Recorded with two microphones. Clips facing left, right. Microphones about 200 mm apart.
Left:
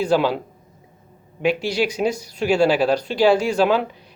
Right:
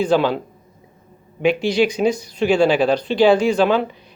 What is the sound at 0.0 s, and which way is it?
Speech, 5° left (ahead or behind).